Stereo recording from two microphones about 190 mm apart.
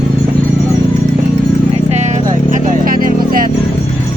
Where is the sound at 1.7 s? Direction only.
35° right (ahead or behind).